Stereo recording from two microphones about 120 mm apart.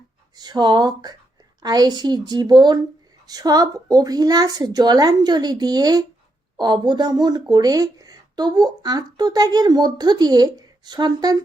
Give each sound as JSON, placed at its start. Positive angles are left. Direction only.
{"t": 0.3, "sound": "speech", "side_deg": -35}